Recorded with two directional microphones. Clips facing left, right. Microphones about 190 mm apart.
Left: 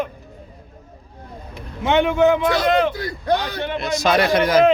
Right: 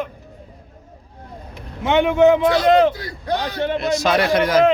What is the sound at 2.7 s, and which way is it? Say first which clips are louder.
Speech: right 5 dB; 35° right (ahead or behind).